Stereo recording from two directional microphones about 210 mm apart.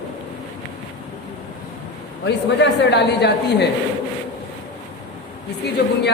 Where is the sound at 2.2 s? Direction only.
55° left (ahead or behind).